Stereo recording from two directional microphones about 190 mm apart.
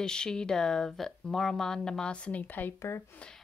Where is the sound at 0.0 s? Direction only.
5° left (ahead or behind).